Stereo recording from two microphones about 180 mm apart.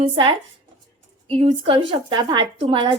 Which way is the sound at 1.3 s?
30° right (ahead or behind).